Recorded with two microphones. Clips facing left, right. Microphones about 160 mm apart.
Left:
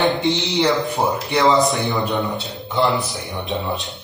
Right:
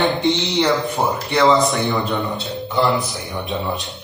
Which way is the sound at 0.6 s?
Centre (ahead or behind).